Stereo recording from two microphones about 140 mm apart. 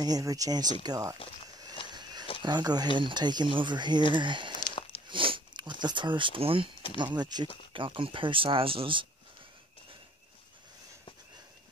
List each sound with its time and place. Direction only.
0.0 s speech: 25° right (ahead or behind)
2.0 s a sound: 30° right (ahead or behind)
2.4 s speech: 30° right (ahead or behind)